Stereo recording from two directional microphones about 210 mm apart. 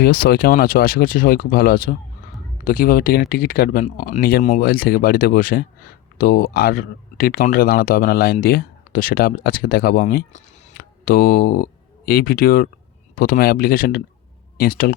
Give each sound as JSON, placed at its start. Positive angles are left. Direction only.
{"t": 0.0, "sound": "speech", "side_deg": 45}